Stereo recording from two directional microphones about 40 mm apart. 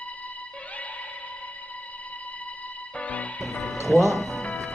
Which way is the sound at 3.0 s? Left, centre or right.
Left.